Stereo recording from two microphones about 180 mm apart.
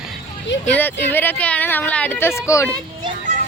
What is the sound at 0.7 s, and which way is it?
Speech, 10° left (ahead or behind).